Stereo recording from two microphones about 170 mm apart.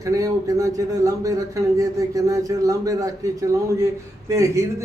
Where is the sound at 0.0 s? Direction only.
20° right (ahead or behind).